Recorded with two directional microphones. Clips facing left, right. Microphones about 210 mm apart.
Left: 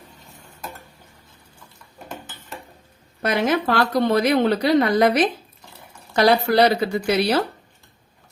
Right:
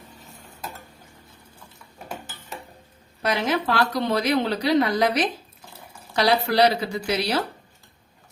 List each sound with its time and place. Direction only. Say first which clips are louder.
3.2 s a woman's voice: left 3 dB; 55° left (ahead or behind)